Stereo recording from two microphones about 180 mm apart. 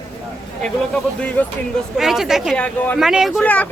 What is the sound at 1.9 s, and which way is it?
Speech, centre (ahead or behind).